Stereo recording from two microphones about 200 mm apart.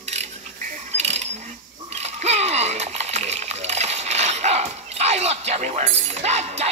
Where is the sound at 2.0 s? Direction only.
35° right (ahead or behind).